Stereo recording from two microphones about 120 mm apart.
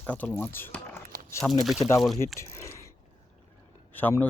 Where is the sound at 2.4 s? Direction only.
25° left (ahead or behind).